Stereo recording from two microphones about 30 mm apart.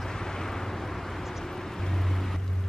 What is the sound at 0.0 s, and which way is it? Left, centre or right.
Vehicle, centre.